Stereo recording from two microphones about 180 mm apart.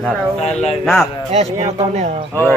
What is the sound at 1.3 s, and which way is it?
Speech, 35° right (ahead or behind).